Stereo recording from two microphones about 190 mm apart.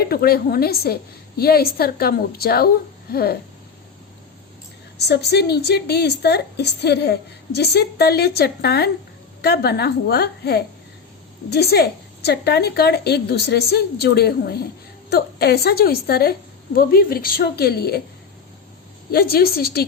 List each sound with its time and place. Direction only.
0.0 s a woman's voice: 55° left (ahead or behind)
4.9 s a woman's voice: 60° left (ahead or behind)
19.1 s a woman's voice: 55° left (ahead or behind)